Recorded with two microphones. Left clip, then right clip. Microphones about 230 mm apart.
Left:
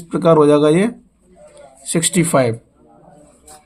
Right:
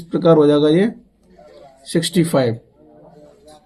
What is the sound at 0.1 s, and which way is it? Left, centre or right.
Speech, left.